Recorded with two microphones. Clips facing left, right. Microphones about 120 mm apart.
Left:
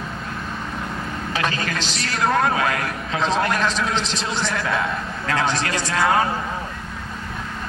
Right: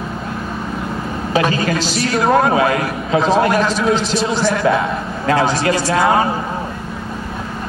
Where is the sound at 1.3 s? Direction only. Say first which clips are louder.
Right 9 dB; 10° right (ahead or behind).